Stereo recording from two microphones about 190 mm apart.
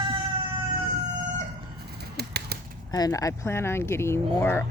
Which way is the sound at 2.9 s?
20° left (ahead or behind).